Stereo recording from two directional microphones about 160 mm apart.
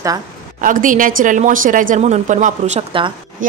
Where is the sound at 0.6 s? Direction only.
55° right (ahead or behind).